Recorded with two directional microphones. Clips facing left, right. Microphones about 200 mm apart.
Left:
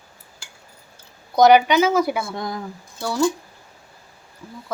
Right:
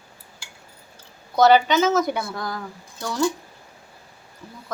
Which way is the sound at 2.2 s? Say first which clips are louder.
Left 2 dB; 20° left (ahead or behind).